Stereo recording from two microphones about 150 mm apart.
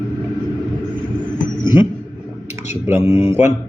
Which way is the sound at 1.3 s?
30° left (ahead or behind).